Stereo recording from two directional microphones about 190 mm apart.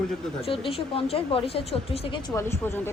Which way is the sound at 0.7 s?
30° left (ahead or behind).